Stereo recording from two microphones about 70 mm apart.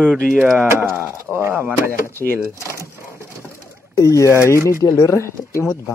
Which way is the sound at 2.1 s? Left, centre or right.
Left.